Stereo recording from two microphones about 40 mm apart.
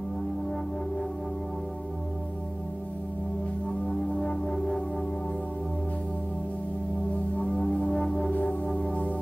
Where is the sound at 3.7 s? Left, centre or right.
Left.